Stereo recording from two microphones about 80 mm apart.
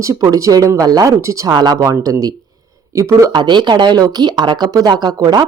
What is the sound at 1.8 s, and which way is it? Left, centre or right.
Speech, right.